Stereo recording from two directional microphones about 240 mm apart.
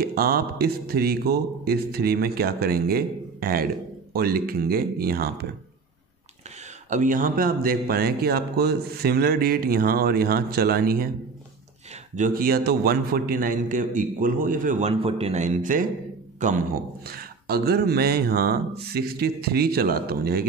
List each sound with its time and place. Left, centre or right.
0.0 s speech: right
6.9 s speech: right
12.2 s a man's voice: right